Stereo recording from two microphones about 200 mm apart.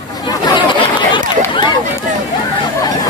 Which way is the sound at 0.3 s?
20° left (ahead or behind).